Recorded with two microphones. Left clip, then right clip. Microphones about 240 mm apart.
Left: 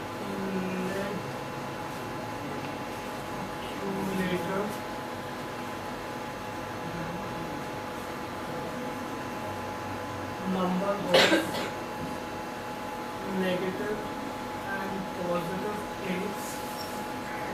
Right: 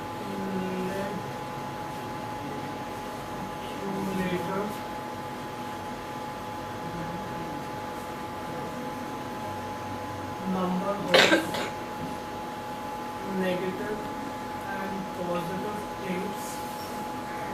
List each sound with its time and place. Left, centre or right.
11.1 s cough: centre